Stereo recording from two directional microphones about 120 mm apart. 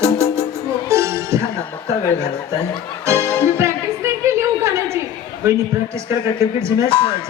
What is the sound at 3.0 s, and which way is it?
Music, 25° right (ahead or behind).